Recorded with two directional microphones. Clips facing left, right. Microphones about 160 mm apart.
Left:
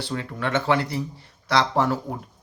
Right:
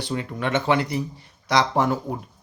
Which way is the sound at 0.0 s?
15° right (ahead or behind).